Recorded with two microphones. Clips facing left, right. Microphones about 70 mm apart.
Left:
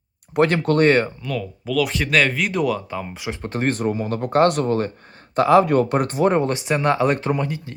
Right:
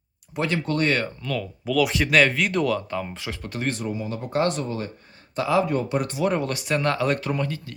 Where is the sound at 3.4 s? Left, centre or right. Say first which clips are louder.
Left 7 dB; left.